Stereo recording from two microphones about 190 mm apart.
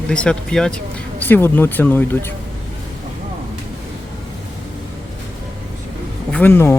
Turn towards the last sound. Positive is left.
turn(degrees=15)  # may be behind; listen again after turning